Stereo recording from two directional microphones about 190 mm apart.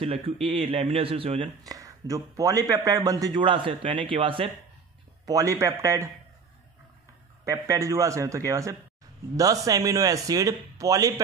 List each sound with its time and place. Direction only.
0.0 s a man's voice: 30° right (ahead or behind)
7.4 s a man's voice: 15° right (ahead or behind)